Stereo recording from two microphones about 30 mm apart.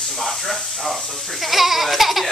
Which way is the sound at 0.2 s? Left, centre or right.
Centre.